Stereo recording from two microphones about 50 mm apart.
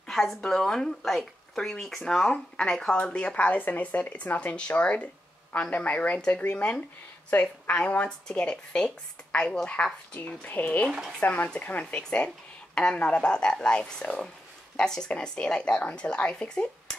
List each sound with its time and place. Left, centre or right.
0.1 s a woman's voice: centre; by 6.8 s left
7.2 s a woman's voice: left
8.4 s speech: centre; by 11.5 s left
11.9 s speech: left